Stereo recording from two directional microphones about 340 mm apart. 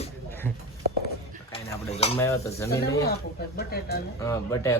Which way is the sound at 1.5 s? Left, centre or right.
Centre.